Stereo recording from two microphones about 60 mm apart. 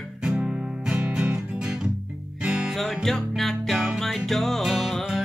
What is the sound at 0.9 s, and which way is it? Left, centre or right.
Music, right.